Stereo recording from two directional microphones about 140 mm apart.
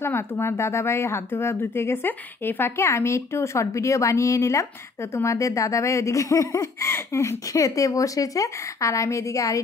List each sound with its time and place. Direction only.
0.0 s speech: 15° left (ahead or behind)